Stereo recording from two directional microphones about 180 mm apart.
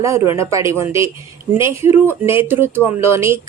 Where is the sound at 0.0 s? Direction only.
15° right (ahead or behind).